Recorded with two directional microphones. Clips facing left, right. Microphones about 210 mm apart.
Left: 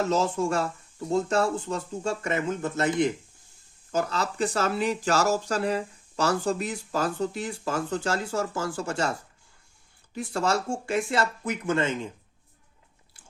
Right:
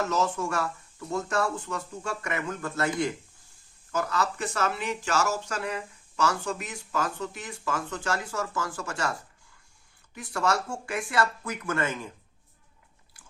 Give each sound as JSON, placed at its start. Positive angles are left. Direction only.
{"t": 0.0, "sound": "speech", "side_deg": 30}
{"t": 10.2, "sound": "speech", "side_deg": 30}